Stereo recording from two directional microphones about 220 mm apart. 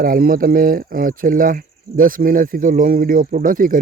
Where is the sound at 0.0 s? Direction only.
40° right (ahead or behind).